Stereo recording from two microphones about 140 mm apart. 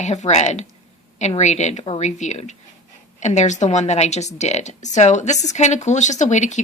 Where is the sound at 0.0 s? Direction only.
55° left (ahead or behind).